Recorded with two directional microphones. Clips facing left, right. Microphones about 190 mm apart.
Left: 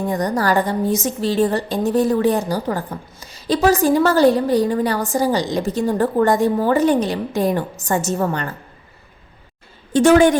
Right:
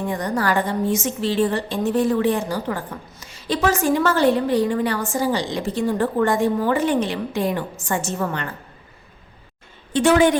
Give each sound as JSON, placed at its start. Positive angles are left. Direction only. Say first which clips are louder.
{"t": 0.0, "sound": "a woman's voice", "louder": "left 3 dB", "side_deg": 40}
{"t": 9.9, "sound": "a woman's voice", "louder": "left 4 dB", "side_deg": 45}